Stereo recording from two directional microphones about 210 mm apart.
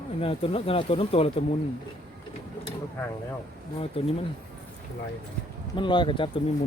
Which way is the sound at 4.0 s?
25° left (ahead or behind).